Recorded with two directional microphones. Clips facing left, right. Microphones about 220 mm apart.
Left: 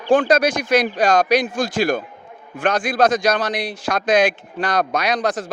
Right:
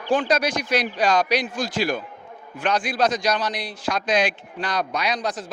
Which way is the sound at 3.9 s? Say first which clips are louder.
Left 5 dB; 50° left (ahead or behind).